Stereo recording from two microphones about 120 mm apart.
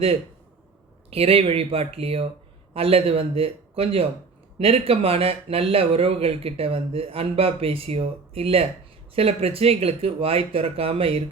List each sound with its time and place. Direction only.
1.1 s speech: 55° right (ahead or behind)